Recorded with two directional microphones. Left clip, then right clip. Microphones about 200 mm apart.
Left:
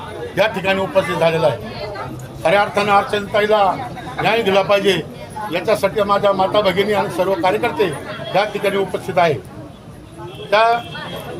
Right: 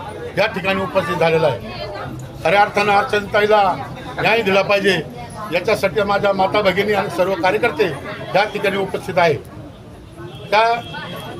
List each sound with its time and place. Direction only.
0.3 s speech: centre (ahead or behind)
10.5 s a man's voice: 5° right (ahead or behind)